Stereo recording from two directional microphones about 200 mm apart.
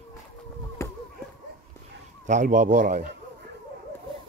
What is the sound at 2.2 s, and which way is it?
Speech, 40° right (ahead or behind).